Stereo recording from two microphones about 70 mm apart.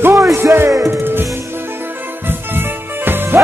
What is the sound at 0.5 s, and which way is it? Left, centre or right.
Speech, right.